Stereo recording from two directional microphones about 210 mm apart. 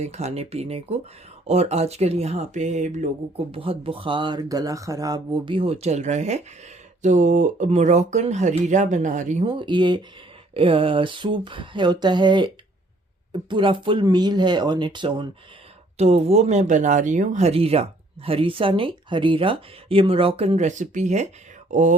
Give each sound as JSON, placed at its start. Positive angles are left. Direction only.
{"t": 0.0, "sound": "speech", "side_deg": -30}